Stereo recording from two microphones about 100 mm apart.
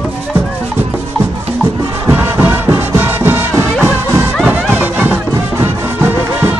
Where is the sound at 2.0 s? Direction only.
20° right (ahead or behind).